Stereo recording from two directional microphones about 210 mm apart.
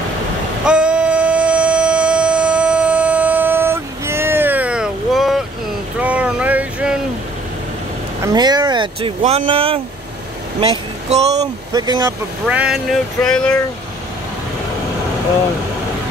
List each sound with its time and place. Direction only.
0.7 s a sound: 5° right (ahead or behind)
5.9 s vehicle: 5° right (ahead or behind)
8.2 s vehicle: 20° right (ahead or behind)
9.2 s speech: 35° right (ahead or behind)
11.7 s speech: 20° right (ahead or behind)
12.4 s a sound: 5° right (ahead or behind)